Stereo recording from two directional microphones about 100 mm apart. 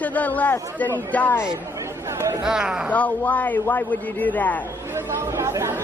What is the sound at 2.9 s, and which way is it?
A woman's voice, 15° left (ahead or behind).